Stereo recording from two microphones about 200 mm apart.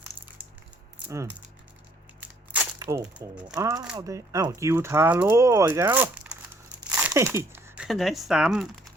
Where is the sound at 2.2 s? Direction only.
5° right (ahead or behind).